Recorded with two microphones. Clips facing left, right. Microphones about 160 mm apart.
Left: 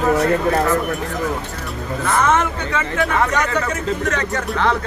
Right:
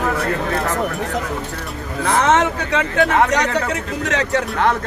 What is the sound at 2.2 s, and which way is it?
Speech, 80° right.